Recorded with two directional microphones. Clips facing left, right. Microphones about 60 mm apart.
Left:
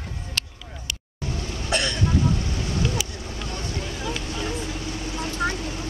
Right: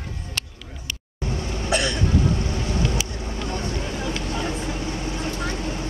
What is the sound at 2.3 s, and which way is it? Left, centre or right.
Boat, centre.